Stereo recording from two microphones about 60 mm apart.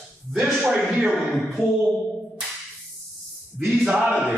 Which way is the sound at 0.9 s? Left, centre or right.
Centre.